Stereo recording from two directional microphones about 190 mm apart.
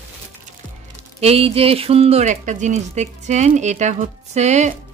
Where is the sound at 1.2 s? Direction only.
30° right (ahead or behind).